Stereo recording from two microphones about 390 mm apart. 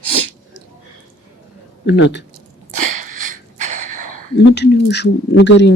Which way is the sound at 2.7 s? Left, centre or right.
Right.